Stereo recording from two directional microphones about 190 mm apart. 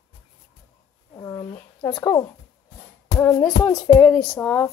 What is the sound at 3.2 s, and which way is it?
Speech, 10° left (ahead or behind).